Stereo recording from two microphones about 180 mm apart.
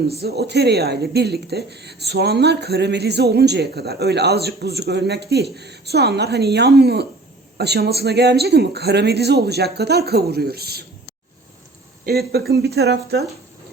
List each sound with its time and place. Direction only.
0.2 s speech: 65° right (ahead or behind)
12.0 s speech: 60° right (ahead or behind)